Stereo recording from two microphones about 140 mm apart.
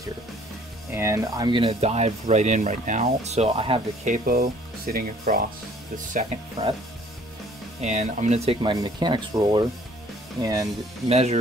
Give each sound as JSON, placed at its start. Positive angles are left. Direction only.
{"t": 0.9, "sound": "speech", "side_deg": -20}
{"t": 4.0, "sound": "speech", "side_deg": -80}
{"t": 7.8, "sound": "speech", "side_deg": -55}
{"t": 8.6, "sound": "speech", "side_deg": -30}
{"t": 11.1, "sound": "speech", "side_deg": -50}